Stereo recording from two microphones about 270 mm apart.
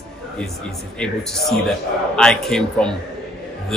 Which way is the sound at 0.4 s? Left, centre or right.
Centre.